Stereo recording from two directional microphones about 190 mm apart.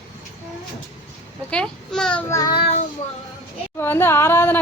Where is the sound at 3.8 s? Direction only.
10° left (ahead or behind).